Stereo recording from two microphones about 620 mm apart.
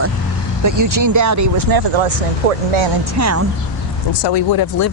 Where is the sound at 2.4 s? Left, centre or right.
Right.